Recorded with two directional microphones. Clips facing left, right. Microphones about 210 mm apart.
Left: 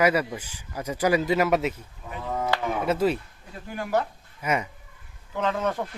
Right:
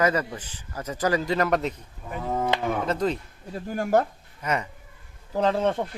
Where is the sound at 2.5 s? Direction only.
20° right (ahead or behind).